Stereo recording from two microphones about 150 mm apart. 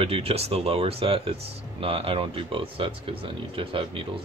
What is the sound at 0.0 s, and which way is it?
Speech, 40° right (ahead or behind).